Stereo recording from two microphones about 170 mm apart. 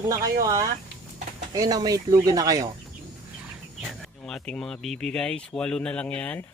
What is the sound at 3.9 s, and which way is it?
Speech, 5° left (ahead or behind).